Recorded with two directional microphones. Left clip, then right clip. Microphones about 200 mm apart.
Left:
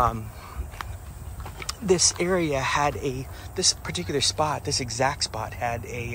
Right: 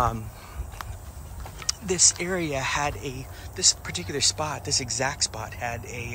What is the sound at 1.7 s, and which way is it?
Speech, centre (ahead or behind).